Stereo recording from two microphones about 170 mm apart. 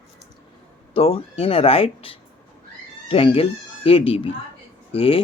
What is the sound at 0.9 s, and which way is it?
Speech, 35° left (ahead or behind).